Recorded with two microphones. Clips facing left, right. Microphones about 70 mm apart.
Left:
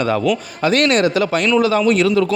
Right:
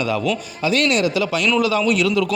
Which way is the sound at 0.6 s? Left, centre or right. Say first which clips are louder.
Left 3 dB; left.